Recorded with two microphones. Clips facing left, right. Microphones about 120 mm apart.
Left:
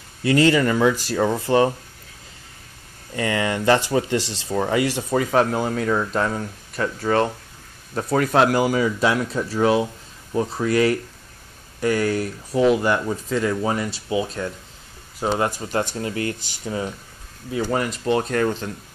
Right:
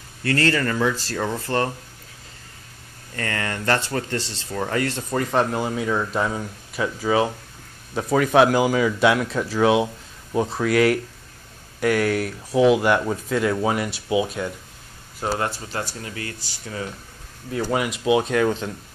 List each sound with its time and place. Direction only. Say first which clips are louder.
0.2 s speech: left 5 dB; 15° left (ahead or behind)
3.2 s speech: left 5 dB; 15° left (ahead or behind); by 14.5 s 10° right (ahead or behind)
15.3 s speech: left 6 dB; 15° left (ahead or behind)
16.0 s speech: left 8 dB; 30° left (ahead or behind)
16.3 s speech: left 4 dB; 20° left (ahead or behind)
17.6 s speech: right 2 dB; 5° right (ahead or behind)